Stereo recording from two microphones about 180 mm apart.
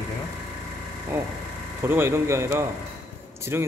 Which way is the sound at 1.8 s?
15° right (ahead or behind).